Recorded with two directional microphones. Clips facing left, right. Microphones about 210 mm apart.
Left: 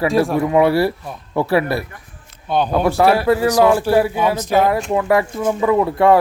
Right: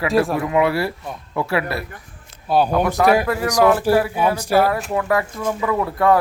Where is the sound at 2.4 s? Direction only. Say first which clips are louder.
Right 1 dB; 5° right (ahead or behind).